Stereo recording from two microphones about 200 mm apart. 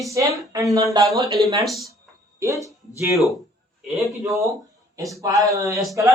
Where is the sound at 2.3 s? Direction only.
15° right (ahead or behind).